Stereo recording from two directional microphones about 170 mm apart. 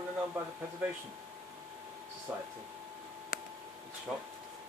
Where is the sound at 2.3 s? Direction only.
5° right (ahead or behind).